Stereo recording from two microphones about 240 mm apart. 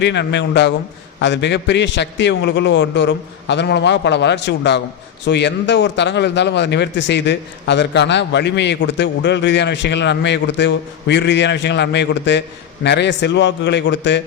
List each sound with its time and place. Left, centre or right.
0.0 s a man's voice: left